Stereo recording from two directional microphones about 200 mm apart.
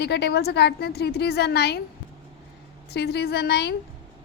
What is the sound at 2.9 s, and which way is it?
Speech, 55° left (ahead or behind).